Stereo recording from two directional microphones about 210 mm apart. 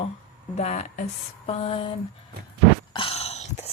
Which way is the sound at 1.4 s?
25° left (ahead or behind).